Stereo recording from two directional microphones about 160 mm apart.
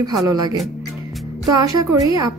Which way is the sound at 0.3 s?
25° right (ahead or behind).